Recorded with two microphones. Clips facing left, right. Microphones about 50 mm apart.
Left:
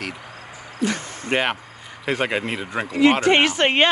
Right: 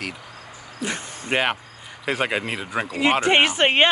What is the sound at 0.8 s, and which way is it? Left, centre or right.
Speech, right.